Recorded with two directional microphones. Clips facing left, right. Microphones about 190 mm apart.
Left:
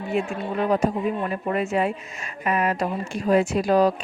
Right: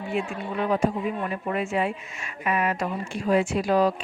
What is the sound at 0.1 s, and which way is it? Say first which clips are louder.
Speech: left 4 dB; 40° left (ahead or behind).